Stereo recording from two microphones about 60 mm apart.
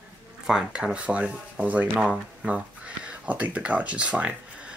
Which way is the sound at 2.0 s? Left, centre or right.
Centre.